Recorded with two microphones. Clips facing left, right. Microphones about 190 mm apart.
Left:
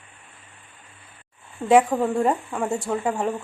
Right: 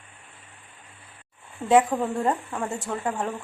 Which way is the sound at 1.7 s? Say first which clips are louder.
Left 2 dB; 10° left (ahead or behind).